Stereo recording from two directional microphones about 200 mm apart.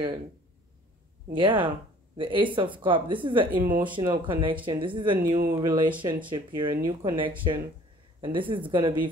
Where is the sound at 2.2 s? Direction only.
25° right (ahead or behind).